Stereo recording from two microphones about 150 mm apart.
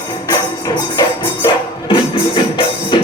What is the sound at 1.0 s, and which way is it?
Music, 30° left (ahead or behind).